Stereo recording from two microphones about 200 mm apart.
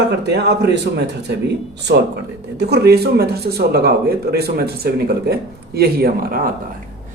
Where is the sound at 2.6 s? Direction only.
55° right (ahead or behind).